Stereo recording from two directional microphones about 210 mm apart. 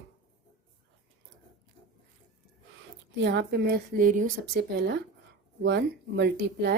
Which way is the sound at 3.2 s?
55° right (ahead or behind).